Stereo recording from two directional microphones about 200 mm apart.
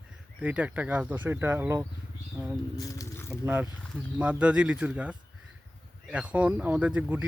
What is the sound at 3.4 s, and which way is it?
Speech, 5° right (ahead or behind).